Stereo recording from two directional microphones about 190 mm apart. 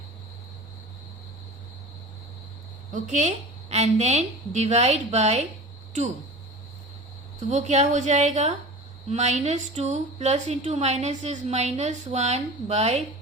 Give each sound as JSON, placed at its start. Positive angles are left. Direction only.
{"t": 2.9, "sound": "a woman's voice", "side_deg": -40}
{"t": 7.5, "sound": "a woman's voice", "side_deg": -35}